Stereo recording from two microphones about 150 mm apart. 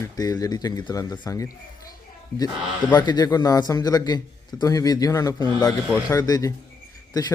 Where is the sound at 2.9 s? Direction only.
25° left (ahead or behind).